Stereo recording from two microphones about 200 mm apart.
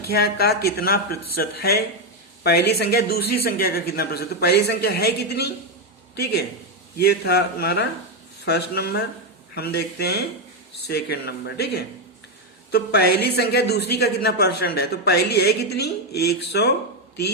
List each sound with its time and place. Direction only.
0.1 s a woman's voice: 50° left (ahead or behind)
6.9 s a woman's voice: 55° left (ahead or behind)